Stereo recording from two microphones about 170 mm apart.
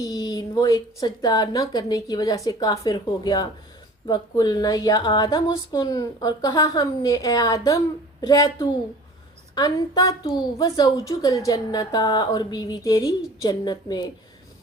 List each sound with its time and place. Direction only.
0.0 s a woman's voice: 20° left (ahead or behind)